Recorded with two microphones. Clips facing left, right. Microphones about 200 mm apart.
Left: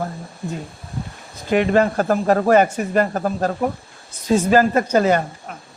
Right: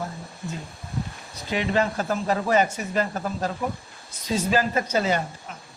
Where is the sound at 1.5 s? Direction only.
50° left (ahead or behind).